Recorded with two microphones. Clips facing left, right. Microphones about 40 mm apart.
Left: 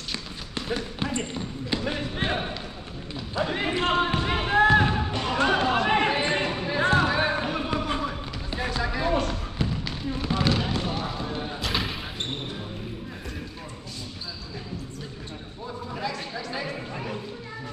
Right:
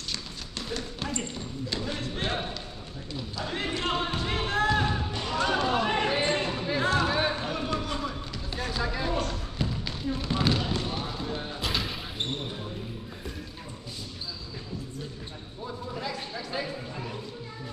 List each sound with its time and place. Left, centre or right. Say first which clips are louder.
0.1 s speech: left 4 dB; left
4.7 s music: left 6 dB; left
6.4 s basketball bounce: left 3 dB; left
8.0 s run: left 3 dB; centre
8.7 s music: left 4 dB; centre
9.6 s basketball bounce: left 1 dB; centre
16.6 s a sound: left 3 dB; left